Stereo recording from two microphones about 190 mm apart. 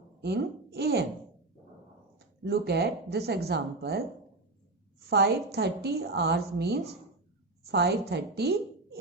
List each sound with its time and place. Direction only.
0.2 s speech: 60° right (ahead or behind)
2.1 s a woman's voice: 60° right (ahead or behind)